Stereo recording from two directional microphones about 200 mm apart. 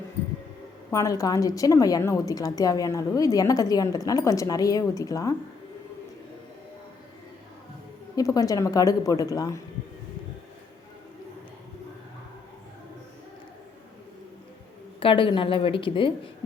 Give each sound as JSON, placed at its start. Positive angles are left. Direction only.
{"t": 0.9, "sound": "a woman's voice", "side_deg": 15}
{"t": 8.1, "sound": "a woman's voice", "side_deg": 15}
{"t": 15.0, "sound": "a woman's voice", "side_deg": 25}